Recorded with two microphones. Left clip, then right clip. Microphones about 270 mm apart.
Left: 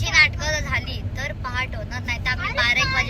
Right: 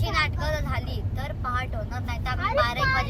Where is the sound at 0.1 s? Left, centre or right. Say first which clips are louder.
Left 9 dB; centre.